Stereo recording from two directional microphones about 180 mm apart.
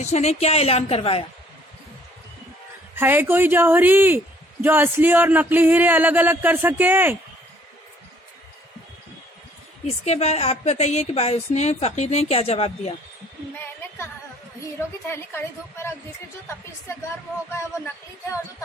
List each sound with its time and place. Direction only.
0.0 s a woman's voice: 40° left (ahead or behind)
2.9 s speech: 10° right (ahead or behind)
9.8 s a woman's voice: 35° left (ahead or behind)
15.1 s speech: 15° left (ahead or behind)
17.5 s speech: 15° left (ahead or behind)